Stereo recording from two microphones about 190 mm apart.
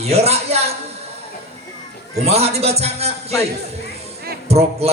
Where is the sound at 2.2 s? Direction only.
35° right (ahead or behind).